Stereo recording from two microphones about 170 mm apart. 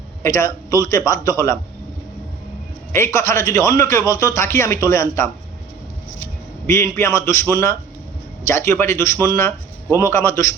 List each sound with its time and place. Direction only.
0.2 s a man's voice: 15° left (ahead or behind)
2.9 s a man's voice: 15° left (ahead or behind)
6.7 s a man's voice: 15° left (ahead or behind)